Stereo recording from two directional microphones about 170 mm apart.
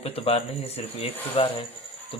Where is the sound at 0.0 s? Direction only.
35° left (ahead or behind).